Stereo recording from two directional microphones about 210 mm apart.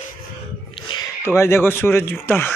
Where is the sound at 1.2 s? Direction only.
10° left (ahead or behind).